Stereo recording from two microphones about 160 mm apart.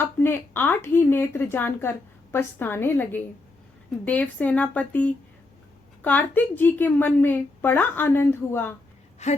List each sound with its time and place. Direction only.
0.0 s a woman's voice: 10° left (ahead or behind)
9.2 s speech: 45° left (ahead or behind)